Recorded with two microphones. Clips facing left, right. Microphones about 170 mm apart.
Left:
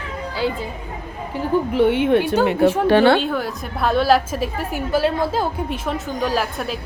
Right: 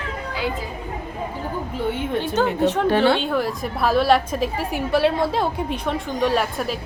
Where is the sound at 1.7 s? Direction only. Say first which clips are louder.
Left 9 dB; 75° left (ahead or behind).